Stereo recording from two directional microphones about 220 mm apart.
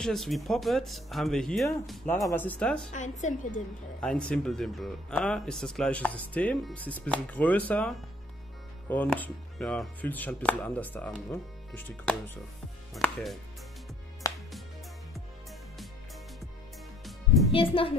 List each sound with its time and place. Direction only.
0.0 s speech: centre (ahead or behind)
2.9 s a woman's voice: 35° left (ahead or behind)
4.0 s speech: 5° left (ahead or behind)
12.9 s chopping: centre (ahead or behind)
17.5 s a woman's voice: 25° left (ahead or behind)